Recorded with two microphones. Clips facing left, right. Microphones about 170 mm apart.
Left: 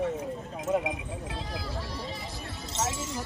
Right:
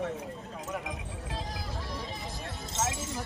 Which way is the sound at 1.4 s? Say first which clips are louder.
Left 3 dB; 45° right (ahead or behind).